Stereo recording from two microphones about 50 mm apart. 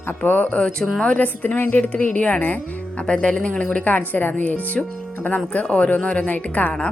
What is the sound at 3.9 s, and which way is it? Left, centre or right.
A woman's voice, left.